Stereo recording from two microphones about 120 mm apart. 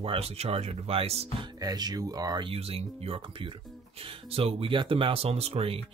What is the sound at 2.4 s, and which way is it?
Speech, 55° right (ahead or behind).